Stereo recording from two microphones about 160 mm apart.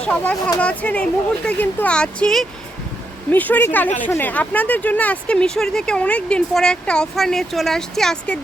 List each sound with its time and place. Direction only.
0.0 s speech: 10° left (ahead or behind)